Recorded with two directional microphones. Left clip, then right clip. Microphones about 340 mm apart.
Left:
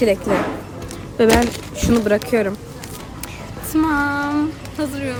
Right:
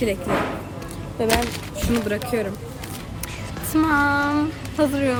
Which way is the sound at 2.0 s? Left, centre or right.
Centre.